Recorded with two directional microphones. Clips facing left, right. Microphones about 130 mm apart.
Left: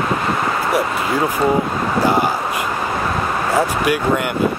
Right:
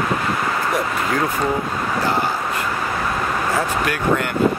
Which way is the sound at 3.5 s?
10° left (ahead or behind).